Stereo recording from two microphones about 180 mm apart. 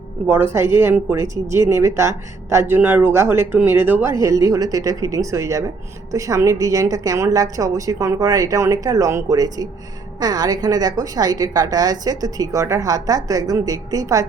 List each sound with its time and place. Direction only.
0.3 s a woman's voice: 15° right (ahead or behind)